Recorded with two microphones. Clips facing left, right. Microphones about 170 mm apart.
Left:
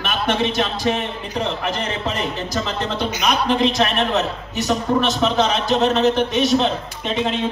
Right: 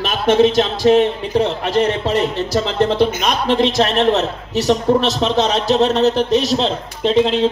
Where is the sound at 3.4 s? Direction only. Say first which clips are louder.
Right 5 dB; 35° right (ahead or behind).